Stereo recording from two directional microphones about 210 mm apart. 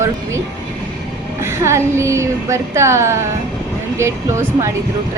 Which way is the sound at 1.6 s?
15° right (ahead or behind).